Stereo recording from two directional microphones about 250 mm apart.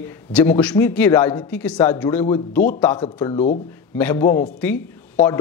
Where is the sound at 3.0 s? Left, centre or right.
Left.